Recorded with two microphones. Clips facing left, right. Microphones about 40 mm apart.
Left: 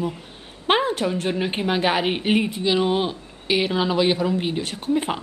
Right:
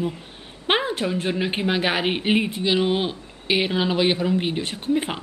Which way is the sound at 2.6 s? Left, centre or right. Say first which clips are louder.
Left 1 dB; centre.